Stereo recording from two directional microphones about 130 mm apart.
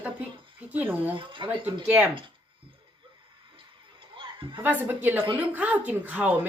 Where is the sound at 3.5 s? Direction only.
40° right (ahead or behind).